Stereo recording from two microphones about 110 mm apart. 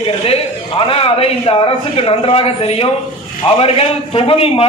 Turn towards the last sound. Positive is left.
turn(degrees=60)  # may be behind; listen again after turning